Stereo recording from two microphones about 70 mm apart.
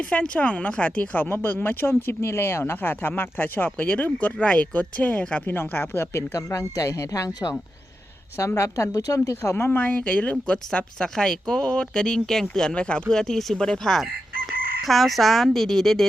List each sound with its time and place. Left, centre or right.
0.0 s speech: centre; by 9.6 s left
9.6 s speech: left
10.9 s speech: centre